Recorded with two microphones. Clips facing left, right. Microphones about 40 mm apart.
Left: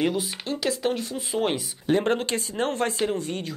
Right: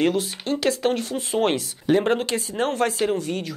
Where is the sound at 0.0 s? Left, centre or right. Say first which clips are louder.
Right 4 dB; centre.